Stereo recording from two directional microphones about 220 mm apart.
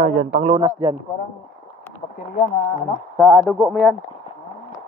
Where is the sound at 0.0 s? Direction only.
35° right (ahead or behind); by 0.9 s 20° right (ahead or behind).